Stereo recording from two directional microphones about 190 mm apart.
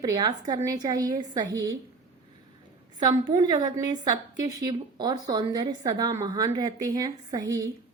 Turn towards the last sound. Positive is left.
turn(degrees=-20)  # may be behind; listen again after turning